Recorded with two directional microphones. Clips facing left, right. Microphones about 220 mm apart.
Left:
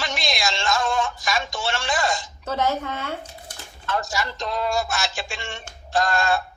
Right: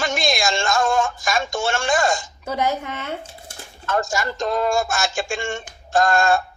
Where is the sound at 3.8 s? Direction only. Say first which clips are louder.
Right 4 dB; 45° right (ahead or behind).